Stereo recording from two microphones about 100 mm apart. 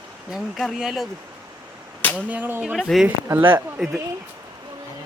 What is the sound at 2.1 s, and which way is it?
Speech, 20° right (ahead or behind).